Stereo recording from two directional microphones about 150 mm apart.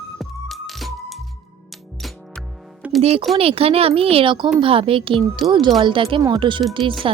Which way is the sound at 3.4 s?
40° right (ahead or behind).